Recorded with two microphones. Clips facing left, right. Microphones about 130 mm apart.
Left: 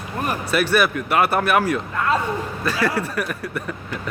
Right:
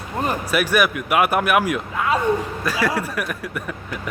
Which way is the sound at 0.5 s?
10° right (ahead or behind).